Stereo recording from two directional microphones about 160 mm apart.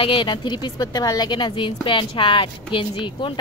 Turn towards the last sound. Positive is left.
turn(degrees=30)  # may be behind; listen again after turning